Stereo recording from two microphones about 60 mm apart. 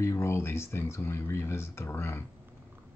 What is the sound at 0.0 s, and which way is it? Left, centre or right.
Speech, left.